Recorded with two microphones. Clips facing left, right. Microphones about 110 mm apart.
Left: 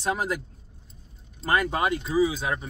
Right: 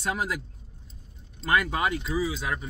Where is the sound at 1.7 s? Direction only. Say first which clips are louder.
Left 4 dB; 25° left (ahead or behind).